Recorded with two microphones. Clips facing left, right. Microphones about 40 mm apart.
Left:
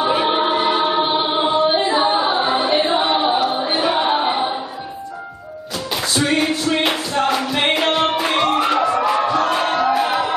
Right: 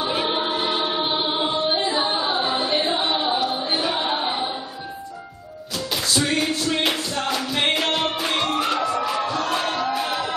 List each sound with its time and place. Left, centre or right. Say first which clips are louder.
0.0 s choir: left 6 dB; centre
2.0 s music: left 6 dB; left
2.4 s choir: left 5 dB; centre
6.1 s music: left 5 dB; centre